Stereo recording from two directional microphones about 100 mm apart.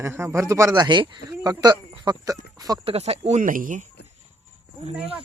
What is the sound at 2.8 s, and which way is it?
Speech, 90° right.